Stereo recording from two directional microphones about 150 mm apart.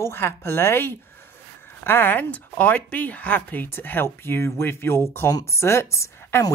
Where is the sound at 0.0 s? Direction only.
15° left (ahead or behind).